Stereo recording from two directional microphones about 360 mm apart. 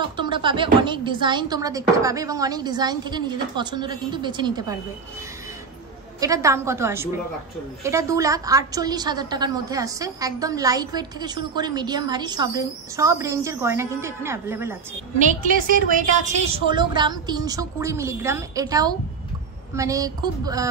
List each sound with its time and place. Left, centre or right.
0.0 s a woman's voice: centre
6.1 s a woman's voice: centre
15.1 s a woman's voice: right